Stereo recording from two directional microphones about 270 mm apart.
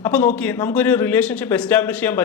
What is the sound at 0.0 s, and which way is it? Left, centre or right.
Speech, centre.